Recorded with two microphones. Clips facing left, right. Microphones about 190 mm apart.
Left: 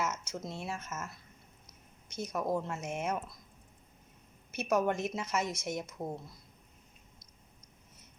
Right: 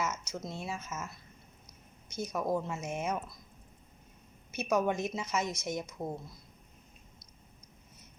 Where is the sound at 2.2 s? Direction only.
Centre (ahead or behind).